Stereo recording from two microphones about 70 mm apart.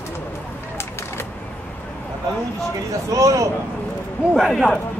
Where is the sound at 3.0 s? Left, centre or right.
Right.